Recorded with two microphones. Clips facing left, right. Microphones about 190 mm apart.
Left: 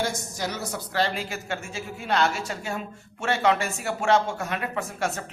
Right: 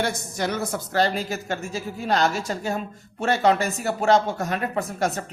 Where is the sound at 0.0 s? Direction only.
60° right (ahead or behind).